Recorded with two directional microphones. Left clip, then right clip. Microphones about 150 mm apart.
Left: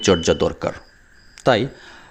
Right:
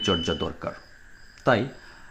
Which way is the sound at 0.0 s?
35° left (ahead or behind).